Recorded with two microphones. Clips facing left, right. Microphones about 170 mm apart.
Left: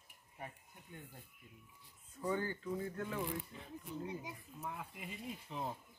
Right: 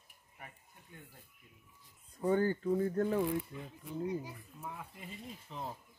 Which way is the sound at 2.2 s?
40° right (ahead or behind).